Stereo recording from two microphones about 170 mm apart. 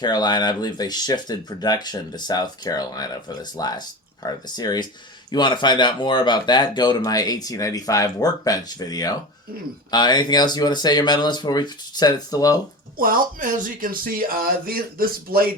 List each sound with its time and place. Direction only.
0.0 s speech: 25° left (ahead or behind)
13.0 s speech: 55° right (ahead or behind)